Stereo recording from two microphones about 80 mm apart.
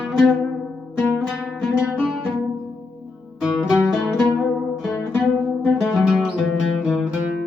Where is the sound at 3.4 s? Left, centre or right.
Centre.